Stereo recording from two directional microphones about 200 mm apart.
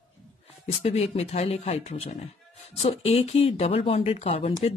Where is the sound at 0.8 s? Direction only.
35° left (ahead or behind).